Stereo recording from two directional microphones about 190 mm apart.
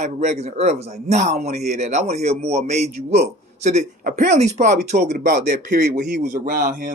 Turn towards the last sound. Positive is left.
turn(degrees=-45)  # may be behind; listen again after turning